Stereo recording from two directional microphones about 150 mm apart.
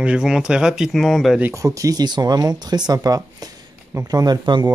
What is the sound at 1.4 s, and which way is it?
Speech, 20° right (ahead or behind).